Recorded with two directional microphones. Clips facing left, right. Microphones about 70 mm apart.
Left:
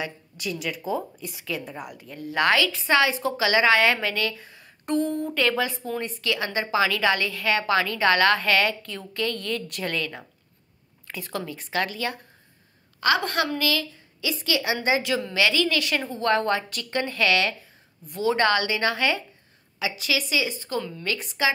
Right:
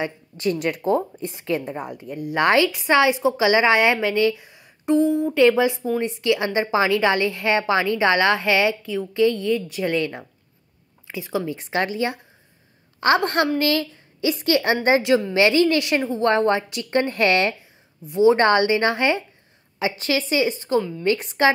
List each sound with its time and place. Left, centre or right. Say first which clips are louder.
0.0 s speech: right 8 dB; right
1.1 s a woman's voice: right 7 dB; right; by 4.6 s centre
4.8 s speech: right 7 dB; centre
5.3 s a woman's voice: right 8 dB; centre
9.8 s a woman's voice: right 7 dB; right
11.1 s speech: right 6 dB; centre
11.4 s a woman's voice: right 4 dB; right
15.0 s a woman's voice: right 7 dB; right